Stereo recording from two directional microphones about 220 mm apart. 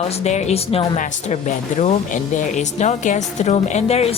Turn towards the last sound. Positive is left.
turn(degrees=30)  # may be behind; listen again after turning